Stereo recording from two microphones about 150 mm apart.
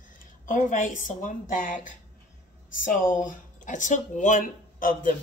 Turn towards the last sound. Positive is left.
turn(degrees=65)  # may be behind; listen again after turning